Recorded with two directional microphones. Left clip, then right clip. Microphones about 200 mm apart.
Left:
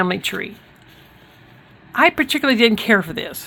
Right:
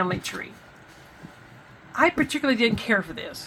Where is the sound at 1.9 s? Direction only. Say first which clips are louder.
Left 6 dB; 60° left (ahead or behind).